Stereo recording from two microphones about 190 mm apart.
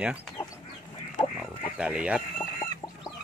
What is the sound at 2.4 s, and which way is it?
Chicken, 15° left (ahead or behind).